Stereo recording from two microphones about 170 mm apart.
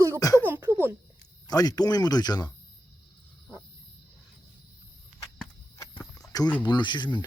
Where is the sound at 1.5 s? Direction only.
20° left (ahead or behind).